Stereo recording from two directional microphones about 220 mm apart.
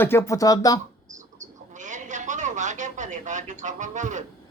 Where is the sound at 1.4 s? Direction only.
35° right (ahead or behind).